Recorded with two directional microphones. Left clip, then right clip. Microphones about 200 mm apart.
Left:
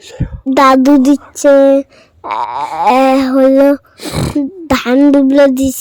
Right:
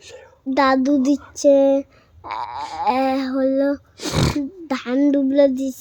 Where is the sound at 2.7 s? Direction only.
45° left (ahead or behind).